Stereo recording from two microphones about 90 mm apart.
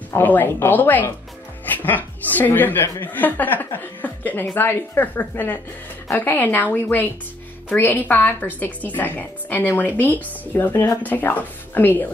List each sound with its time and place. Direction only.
0.1 s a woman's voice: 20° left (ahead or behind)